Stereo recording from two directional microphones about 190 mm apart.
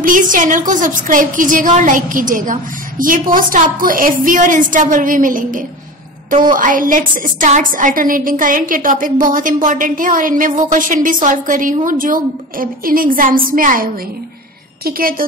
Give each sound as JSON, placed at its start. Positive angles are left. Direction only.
{"t": 0.0, "sound": "a woman's voice", "side_deg": -45}
{"t": 14.9, "sound": "a woman's voice", "side_deg": -50}